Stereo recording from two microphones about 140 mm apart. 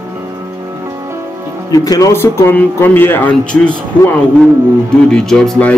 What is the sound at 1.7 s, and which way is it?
Speech, 25° left (ahead or behind).